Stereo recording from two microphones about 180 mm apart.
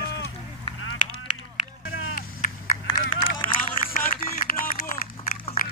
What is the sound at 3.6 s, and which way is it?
Run, 50° left (ahead or behind).